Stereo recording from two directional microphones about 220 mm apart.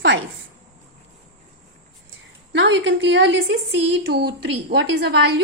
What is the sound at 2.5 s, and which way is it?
A woman's voice, 55° right (ahead or behind).